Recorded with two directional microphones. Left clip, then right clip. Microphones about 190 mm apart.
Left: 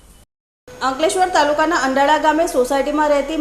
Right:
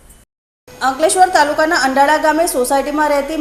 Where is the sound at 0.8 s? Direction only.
25° right (ahead or behind).